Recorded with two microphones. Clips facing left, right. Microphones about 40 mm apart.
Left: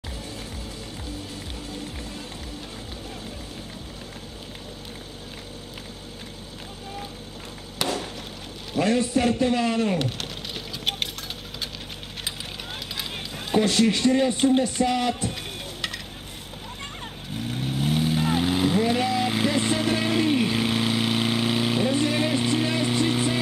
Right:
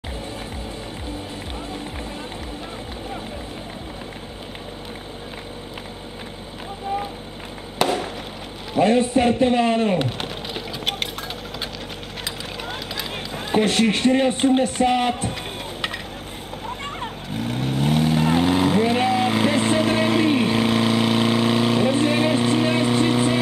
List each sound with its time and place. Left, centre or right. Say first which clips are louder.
8.7 s a man's voice: right 5 dB; right
9.9 s a sound: right 4 dB; centre
13.6 s speech: right 2 dB; right
16.6 s splash: right 8 dB; centre
17.4 s vehicle: right 4 dB; centre
18.8 s vehicle: right 4 dB; right; by 21.8 s centre
21.8 s vehicle: right 4 dB; right